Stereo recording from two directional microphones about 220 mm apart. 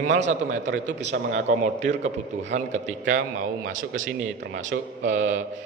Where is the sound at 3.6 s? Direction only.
60° right (ahead or behind).